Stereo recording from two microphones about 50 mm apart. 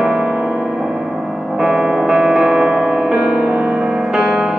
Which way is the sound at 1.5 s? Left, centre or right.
Centre.